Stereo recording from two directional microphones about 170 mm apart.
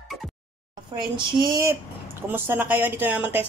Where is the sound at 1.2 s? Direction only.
30° right (ahead or behind).